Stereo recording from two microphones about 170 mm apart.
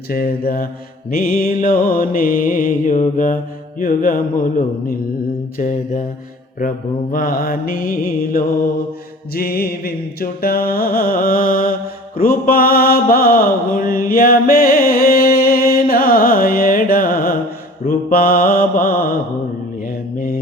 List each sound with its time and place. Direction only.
0.1 s music: 60° left (ahead or behind)
5.5 s mantra: 50° left (ahead or behind)
6.6 s music: 55° left (ahead or behind)
19.8 s mantra: 55° left (ahead or behind)